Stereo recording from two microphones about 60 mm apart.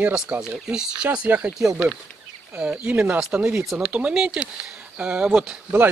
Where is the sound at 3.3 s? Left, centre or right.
Right.